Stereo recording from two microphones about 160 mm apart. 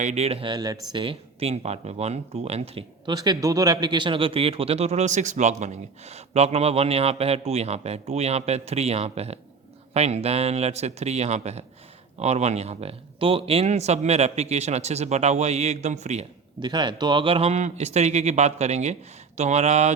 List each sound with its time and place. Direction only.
0.0 s a man's voice: 45° right (ahead or behind)
3.1 s a man's voice: 25° right (ahead or behind); by 16.2 s 45° right (ahead or behind)
16.6 s speech: 30° right (ahead or behind); by 19.9 s 45° right (ahead or behind)